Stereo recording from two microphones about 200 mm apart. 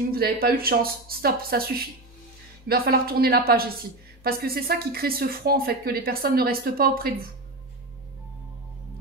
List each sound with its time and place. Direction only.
0.1 s a woman's voice: 50° right (ahead or behind)